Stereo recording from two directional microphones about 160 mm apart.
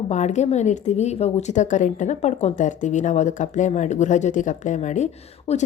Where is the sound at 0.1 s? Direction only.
45° left (ahead or behind).